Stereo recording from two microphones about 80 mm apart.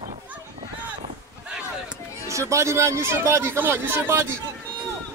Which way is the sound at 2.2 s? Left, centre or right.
Right.